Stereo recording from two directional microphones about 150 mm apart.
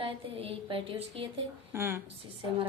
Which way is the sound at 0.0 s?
40° right (ahead or behind).